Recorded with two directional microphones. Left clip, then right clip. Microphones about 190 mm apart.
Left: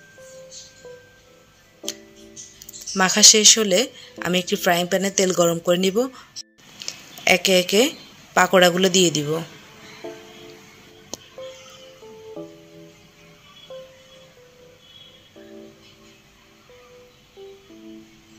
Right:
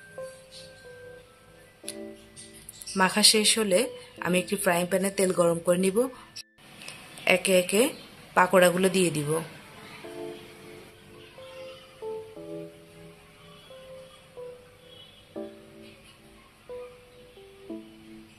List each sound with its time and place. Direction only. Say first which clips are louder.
3.0 s speech: left 7 dB; 15° left (ahead or behind)
6.9 s a sound: left 5 dB; 20° left (ahead or behind)
8.4 s speech: left 5 dB; 20° left (ahead or behind)